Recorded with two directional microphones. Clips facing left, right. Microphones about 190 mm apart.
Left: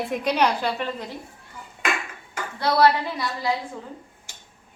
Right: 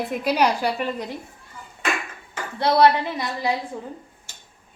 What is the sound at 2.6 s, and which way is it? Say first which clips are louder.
Speech: right 2 dB; 25° right (ahead or behind).